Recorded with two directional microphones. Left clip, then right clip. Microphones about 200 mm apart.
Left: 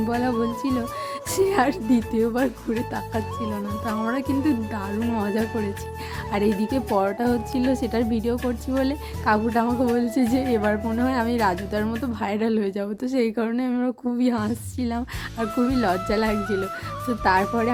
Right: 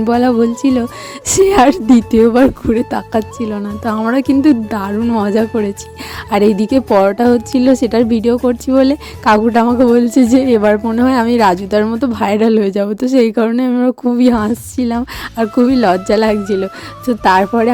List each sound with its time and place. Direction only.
0.1 s a woman's voice: 40° right (ahead or behind)